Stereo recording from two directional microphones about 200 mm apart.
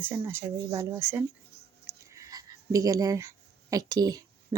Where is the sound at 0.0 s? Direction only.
10° right (ahead or behind).